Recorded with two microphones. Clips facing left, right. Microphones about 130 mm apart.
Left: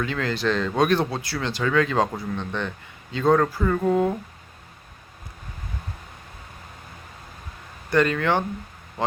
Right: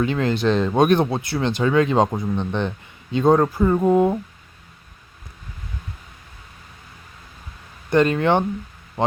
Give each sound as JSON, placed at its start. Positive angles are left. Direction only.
{"t": 0.0, "sound": "speech", "side_deg": -20}
{"t": 7.9, "sound": "speech", "side_deg": -20}